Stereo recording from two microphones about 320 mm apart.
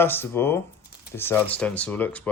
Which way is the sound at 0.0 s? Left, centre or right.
Centre.